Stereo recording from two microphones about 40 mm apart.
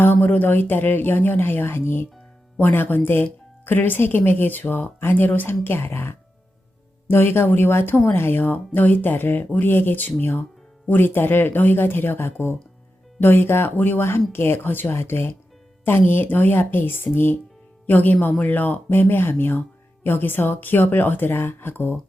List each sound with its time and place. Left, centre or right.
0.2 s speech: left
2.6 s speech: left
5.6 s speech: left
15.8 s speech: left
17.8 s speech: left